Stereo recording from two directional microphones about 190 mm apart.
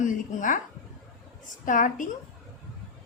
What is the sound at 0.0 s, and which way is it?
Speech, 40° left (ahead or behind).